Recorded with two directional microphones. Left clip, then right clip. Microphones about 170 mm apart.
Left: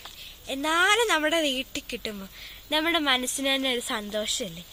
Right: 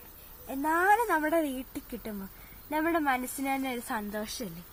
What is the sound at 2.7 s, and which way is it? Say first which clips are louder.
A woman's voice: left 4 dB; 55° left (ahead or behind).